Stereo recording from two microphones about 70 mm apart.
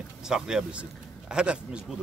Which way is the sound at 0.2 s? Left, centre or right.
Centre.